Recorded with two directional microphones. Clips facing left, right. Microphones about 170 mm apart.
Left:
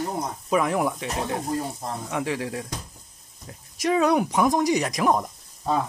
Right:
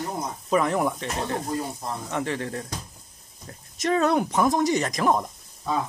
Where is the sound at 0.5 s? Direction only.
5° left (ahead or behind).